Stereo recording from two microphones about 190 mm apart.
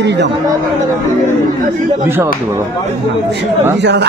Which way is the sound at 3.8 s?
65° right (ahead or behind).